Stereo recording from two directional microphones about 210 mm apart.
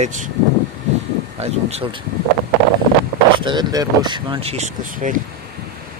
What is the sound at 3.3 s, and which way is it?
Speech, 20° right (ahead or behind).